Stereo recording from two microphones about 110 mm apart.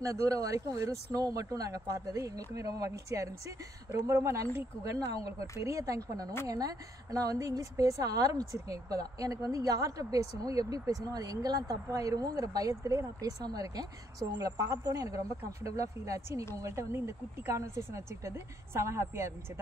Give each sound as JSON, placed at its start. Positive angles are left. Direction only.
{"t": 0.0, "sound": "a woman's voice", "side_deg": -30}
{"t": 5.1, "sound": "speech", "side_deg": 60}
{"t": 5.6, "sound": "a woman's voice", "side_deg": -30}